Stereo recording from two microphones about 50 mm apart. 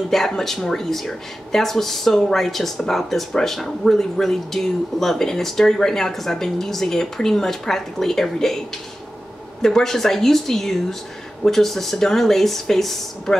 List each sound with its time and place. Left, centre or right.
0.1 s speech: centre